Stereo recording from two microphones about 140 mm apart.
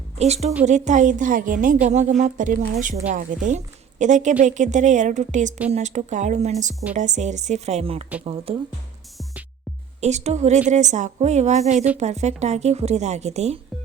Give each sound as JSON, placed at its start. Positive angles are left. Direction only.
{"t": 0.2, "sound": "a woman's voice", "side_deg": -50}
{"t": 1.6, "sound": "a woman's voice", "side_deg": -65}
{"t": 10.0, "sound": "a woman's voice", "side_deg": -55}